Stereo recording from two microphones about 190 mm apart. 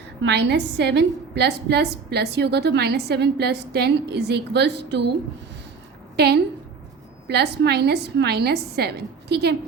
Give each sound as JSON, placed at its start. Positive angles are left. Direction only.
{"t": 0.2, "sound": "a woman's voice", "side_deg": -60}
{"t": 6.1, "sound": "a woman's voice", "side_deg": -60}